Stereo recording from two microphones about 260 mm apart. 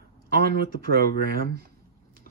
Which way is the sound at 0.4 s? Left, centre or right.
Right.